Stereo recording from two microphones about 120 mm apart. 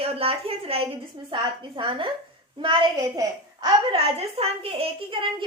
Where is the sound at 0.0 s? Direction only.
50° right (ahead or behind).